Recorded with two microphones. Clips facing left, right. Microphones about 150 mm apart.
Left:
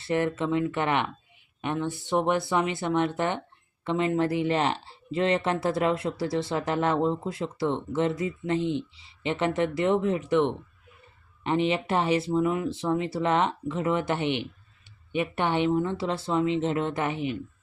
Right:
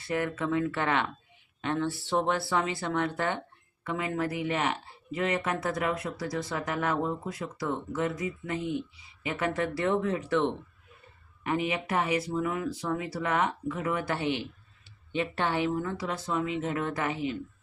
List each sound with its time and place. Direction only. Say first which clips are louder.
0.0 s speech: left 4 dB; 25° left (ahead or behind)